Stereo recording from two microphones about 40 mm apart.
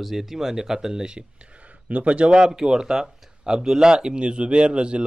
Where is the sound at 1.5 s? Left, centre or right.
Right.